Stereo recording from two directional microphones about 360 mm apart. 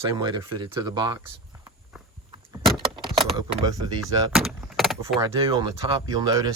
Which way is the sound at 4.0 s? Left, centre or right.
Centre.